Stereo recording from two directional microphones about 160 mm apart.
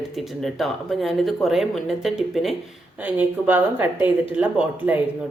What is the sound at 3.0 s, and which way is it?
A woman's voice, 10° right (ahead or behind).